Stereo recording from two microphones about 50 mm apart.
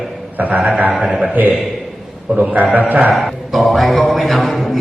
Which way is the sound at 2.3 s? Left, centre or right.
Right.